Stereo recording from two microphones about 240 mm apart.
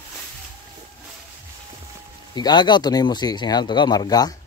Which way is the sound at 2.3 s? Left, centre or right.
Centre.